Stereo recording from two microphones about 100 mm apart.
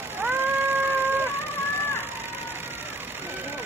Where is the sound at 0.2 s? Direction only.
20° right (ahead or behind).